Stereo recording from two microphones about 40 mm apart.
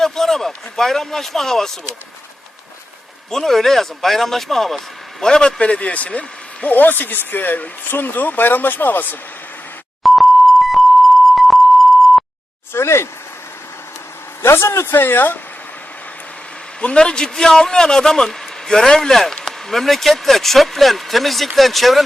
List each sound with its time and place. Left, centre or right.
0.0 s a man's voice: centre
3.2 s a man's voice: centre
5.2 s a man's voice: centre
6.7 s speech: left
10.0 s beep: centre
12.7 s speech: left
14.4 s speech: left
16.8 s a man's voice: left; by 22.0 s centre